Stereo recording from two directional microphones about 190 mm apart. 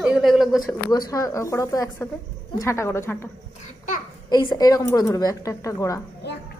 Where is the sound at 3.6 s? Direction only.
45° left (ahead or behind).